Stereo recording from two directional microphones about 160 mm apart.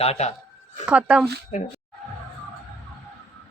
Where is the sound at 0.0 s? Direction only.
40° left (ahead or behind).